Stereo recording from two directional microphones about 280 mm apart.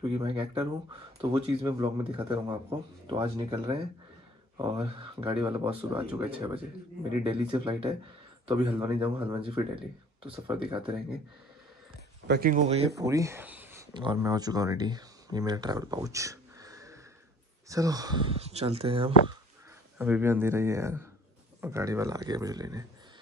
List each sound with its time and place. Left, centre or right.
0.0 s speech: centre
5.5 s speech: centre
6.2 s speech: centre
12.3 s speech: right
13.0 s speech: centre
20.0 s speech: centre